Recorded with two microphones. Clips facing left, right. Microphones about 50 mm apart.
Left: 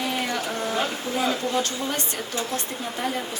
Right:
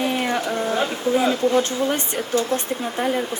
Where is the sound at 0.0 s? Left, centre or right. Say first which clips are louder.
Right 5 dB; right.